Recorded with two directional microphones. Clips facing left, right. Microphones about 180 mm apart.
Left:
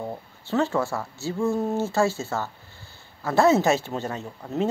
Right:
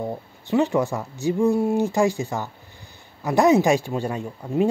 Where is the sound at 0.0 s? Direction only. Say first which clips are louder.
Right 4 dB; 15° right (ahead or behind).